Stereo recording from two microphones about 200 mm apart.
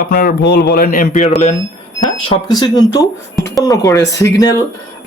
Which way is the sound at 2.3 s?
20° left (ahead or behind).